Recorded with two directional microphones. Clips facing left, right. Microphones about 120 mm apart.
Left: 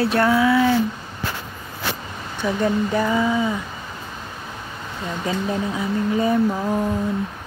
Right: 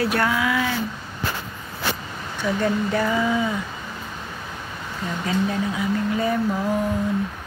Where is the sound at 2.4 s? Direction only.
15° left (ahead or behind).